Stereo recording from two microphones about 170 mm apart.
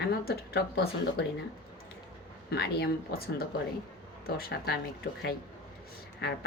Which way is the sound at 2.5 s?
75° left (ahead or behind).